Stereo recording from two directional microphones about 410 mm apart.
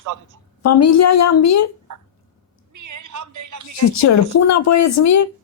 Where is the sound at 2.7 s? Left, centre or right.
Right.